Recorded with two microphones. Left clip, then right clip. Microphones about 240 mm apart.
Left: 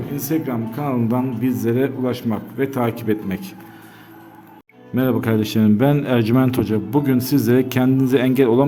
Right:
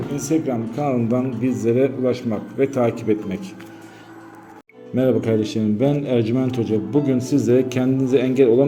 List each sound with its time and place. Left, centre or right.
0.2 s speech: centre
4.9 s speech: left